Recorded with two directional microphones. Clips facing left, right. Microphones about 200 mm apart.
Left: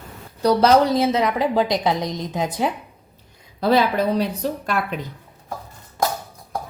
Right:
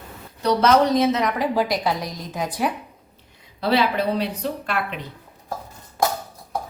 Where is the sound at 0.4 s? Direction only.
35° left (ahead or behind).